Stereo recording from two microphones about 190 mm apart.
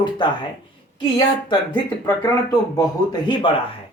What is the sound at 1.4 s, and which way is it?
Speech, 25° left (ahead or behind).